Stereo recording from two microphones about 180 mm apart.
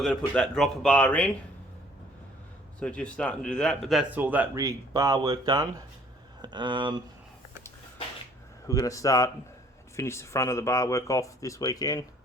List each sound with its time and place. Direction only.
0.0 s speech: 5° left (ahead or behind)
2.8 s speech: 5° left (ahead or behind); by 6.9 s 25° right (ahead or behind)
8.6 s speech: 20° left (ahead or behind)